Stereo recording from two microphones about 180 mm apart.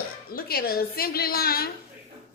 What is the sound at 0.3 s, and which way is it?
A woman's voice, 55° left (ahead or behind).